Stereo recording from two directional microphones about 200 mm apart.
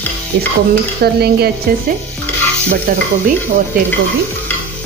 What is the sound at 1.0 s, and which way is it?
Speech, 50° right (ahead or behind).